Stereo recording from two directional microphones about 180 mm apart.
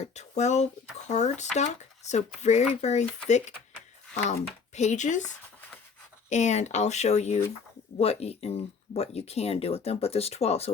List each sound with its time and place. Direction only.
0.0 s speech: 40° left (ahead or behind)
4.7 s speech: 40° left (ahead or behind)
6.2 s speech: 40° left (ahead or behind)